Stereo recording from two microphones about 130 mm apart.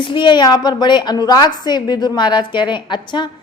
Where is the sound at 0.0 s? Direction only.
40° left (ahead or behind).